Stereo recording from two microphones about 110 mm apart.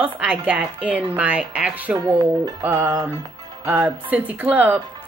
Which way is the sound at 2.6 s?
20° right (ahead or behind).